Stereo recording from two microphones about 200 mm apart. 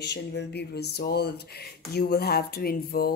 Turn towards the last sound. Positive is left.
turn(degrees=50)  # may be behind; listen again after turning